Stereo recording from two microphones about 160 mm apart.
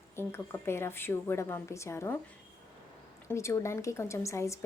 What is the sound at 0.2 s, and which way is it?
A woman's voice, 15° left (ahead or behind).